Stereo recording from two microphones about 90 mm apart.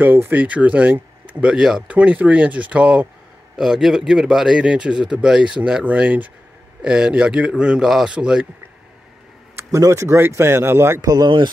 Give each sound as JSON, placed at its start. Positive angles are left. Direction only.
{"t": 0.0, "sound": "speech", "side_deg": -25}
{"t": 9.6, "sound": "speech", "side_deg": -35}
{"t": 11.0, "sound": "speech", "side_deg": -40}
{"t": 11.2, "sound": "speech", "side_deg": -65}